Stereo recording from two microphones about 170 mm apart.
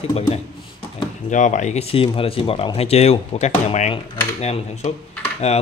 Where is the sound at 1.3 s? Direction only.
45° left (ahead or behind).